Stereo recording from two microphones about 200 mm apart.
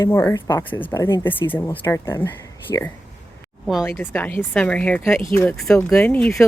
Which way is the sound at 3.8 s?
10° left (ahead or behind).